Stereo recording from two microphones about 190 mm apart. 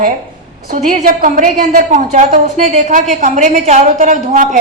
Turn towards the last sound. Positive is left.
turn(degrees=-45)  # may be behind; listen again after turning